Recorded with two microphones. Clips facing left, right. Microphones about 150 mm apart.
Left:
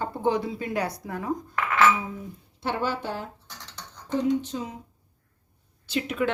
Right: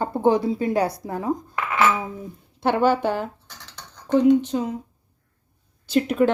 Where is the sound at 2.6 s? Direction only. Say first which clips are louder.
Right 9 dB; 65° right (ahead or behind).